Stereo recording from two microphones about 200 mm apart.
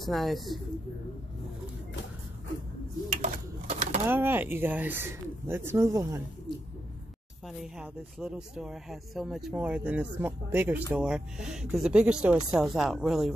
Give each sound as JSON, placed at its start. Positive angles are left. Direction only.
{"t": 0.0, "sound": "speech", "side_deg": 0}
{"t": 3.1, "sound": "pigeon", "side_deg": -35}
{"t": 4.1, "sound": "speech", "side_deg": -10}
{"t": 7.4, "sound": "speech", "side_deg": 0}